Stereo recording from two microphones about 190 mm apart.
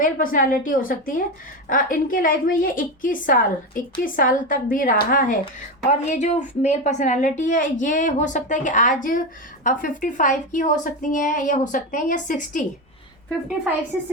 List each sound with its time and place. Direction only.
0.0 s a woman's voice: 45° left (ahead or behind)